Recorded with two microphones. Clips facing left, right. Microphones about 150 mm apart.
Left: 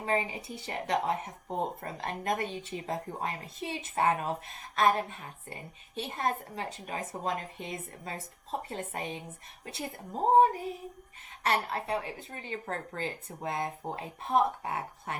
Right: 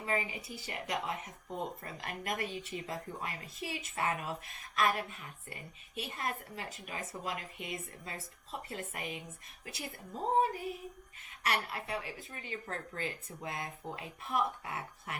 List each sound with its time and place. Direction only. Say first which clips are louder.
0.0 s speech: left 5 dB; 30° left (ahead or behind)
0.8 s a woman's voice: left 8 dB; 40° left (ahead or behind)
10.4 s a woman's voice: left 7 dB; 30° left (ahead or behind)